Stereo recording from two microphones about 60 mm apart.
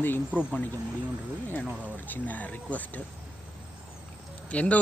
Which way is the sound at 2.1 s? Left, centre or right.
Left.